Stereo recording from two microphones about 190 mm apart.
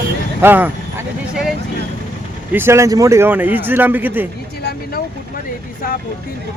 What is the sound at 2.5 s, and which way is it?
Speech, 15° right (ahead or behind).